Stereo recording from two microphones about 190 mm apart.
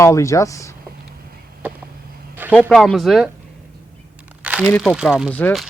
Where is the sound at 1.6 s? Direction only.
10° right (ahead or behind).